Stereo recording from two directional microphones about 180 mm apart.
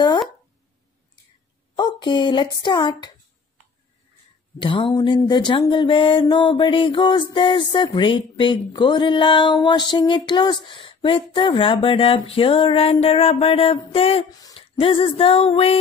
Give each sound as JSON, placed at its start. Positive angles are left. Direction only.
{"t": 1.8, "sound": "speech", "side_deg": 25}
{"t": 4.6, "sound": "a sound", "side_deg": 30}
{"t": 14.4, "sound": "speech", "side_deg": 30}